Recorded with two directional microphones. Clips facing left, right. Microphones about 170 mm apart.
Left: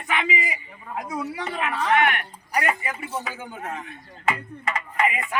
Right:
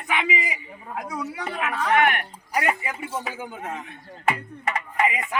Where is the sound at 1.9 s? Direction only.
50° right (ahead or behind).